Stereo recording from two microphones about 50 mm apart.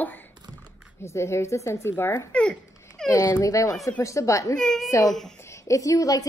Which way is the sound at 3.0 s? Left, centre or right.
Centre.